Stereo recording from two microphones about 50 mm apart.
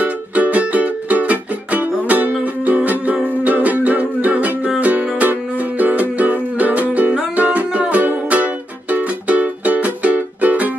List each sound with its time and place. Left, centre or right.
0.0 s music: right